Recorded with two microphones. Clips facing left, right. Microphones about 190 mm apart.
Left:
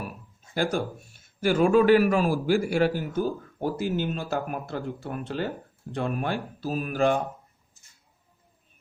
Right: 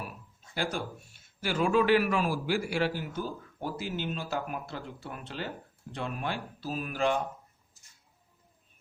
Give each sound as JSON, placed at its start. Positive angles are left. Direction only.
{"t": 0.5, "sound": "a man's voice", "side_deg": 45}